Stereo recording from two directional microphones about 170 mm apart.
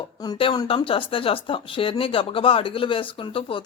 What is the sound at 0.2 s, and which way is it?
Speech, 25° left (ahead or behind).